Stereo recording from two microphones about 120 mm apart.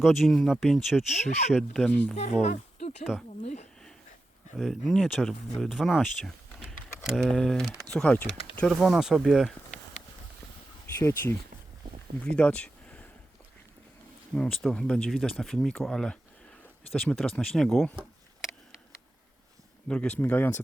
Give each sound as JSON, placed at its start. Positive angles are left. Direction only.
{"t": 0.0, "sound": "speech", "side_deg": 0}
{"t": 2.4, "sound": "a sound", "side_deg": 65}
{"t": 3.0, "sound": "speech", "side_deg": -5}
{"t": 3.4, "sound": "a sound", "side_deg": 65}
{"t": 4.5, "sound": "speech", "side_deg": 0}
{"t": 7.9, "sound": "speech", "side_deg": 10}
{"t": 8.7, "sound": "speech", "side_deg": 0}
{"t": 10.9, "sound": "speech", "side_deg": 20}
{"t": 12.4, "sound": "a sound", "side_deg": 10}
{"t": 14.3, "sound": "speech", "side_deg": 5}
{"t": 19.9, "sound": "speech", "side_deg": 10}